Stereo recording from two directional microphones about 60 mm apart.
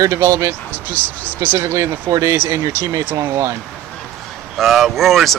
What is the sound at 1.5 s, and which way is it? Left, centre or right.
Speech, right.